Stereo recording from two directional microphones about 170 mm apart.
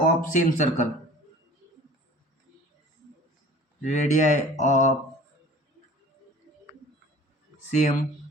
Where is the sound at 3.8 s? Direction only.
45° left (ahead or behind).